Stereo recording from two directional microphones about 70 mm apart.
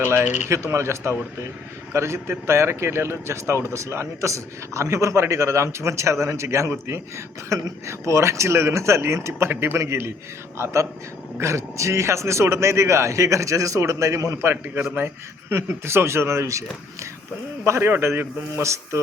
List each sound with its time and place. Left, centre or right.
0.0 s a man's voice: right